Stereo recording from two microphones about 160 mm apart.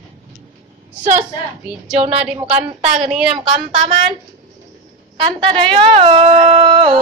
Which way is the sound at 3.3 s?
30° right (ahead or behind).